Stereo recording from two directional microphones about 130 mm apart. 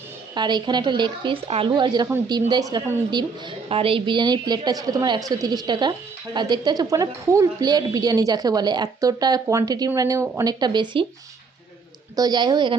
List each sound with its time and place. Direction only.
0.3 s a woman's voice: 35° right (ahead or behind)
3.7 s a woman's voice: 45° right (ahead or behind)
12.1 s a woman's voice: 30° right (ahead or behind)